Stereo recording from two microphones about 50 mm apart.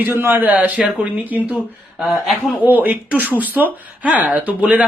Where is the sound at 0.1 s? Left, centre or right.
Right.